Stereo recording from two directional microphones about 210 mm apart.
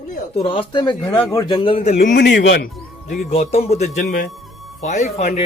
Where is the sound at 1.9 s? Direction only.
50° left (ahead or behind).